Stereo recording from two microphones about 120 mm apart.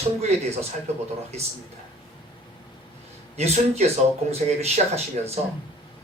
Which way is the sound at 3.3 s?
65° right (ahead or behind).